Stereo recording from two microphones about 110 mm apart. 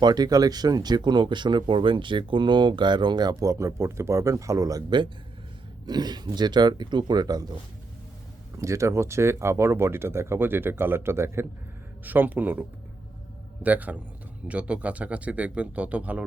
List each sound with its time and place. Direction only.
0.0 s speech: 40° right (ahead or behind)
8.5 s speech: 25° right (ahead or behind)